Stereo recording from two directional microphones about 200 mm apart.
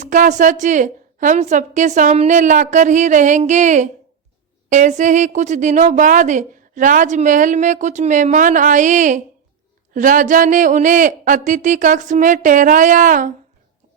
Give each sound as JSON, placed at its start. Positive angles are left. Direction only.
{"t": 0.0, "sound": "a woman's voice", "side_deg": -40}